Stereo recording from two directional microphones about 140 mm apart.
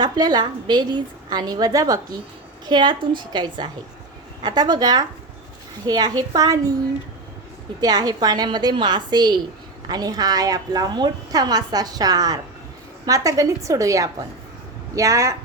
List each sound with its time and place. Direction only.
0.0 s a woman's voice: 30° right (ahead or behind)
7.8 s a woman's voice: 30° right (ahead or behind)